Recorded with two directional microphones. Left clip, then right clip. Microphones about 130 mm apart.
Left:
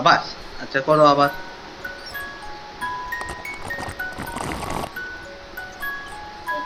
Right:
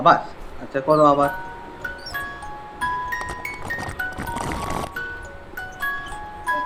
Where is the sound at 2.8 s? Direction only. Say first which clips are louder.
Right 3 dB; centre (ahead or behind).